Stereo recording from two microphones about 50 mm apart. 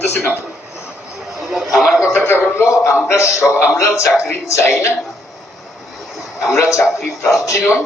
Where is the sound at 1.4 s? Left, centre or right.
Centre.